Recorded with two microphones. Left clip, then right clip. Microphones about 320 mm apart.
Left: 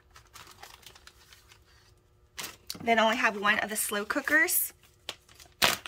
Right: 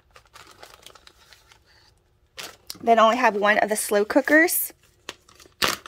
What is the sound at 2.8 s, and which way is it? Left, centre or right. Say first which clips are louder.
Speech: right 8 dB; centre.